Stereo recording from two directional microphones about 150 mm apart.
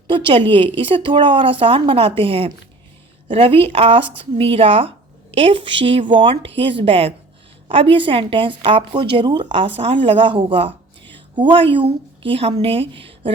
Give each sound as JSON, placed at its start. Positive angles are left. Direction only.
{"t": 0.1, "sound": "a woman's voice", "side_deg": -35}